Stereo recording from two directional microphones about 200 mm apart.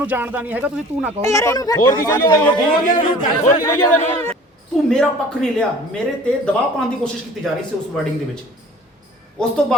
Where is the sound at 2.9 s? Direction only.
40° left (ahead or behind).